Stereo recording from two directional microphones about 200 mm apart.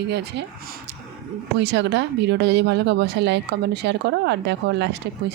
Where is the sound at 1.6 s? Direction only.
60° right (ahead or behind).